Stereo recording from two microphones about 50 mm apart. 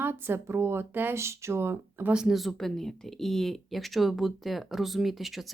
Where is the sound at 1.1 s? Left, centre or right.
Right.